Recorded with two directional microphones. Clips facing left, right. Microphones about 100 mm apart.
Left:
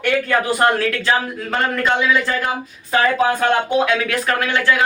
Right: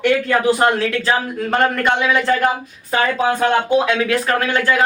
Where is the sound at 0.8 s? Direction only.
25° right (ahead or behind).